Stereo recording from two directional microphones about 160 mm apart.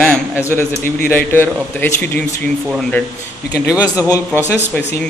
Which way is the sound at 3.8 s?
20° left (ahead or behind).